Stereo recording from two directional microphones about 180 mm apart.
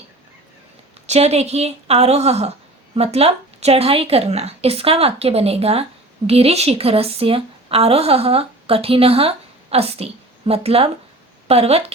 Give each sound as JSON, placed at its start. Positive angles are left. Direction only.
{"t": 1.0, "sound": "a woman's voice", "side_deg": -40}